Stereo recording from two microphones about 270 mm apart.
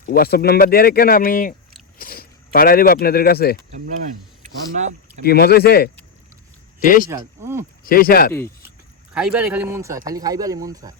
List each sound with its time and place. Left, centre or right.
0.0 s speech: left
4.7 s speech: right
5.2 s speech: left
7.1 s speech: centre
7.9 s speech: left
9.1 s speech: centre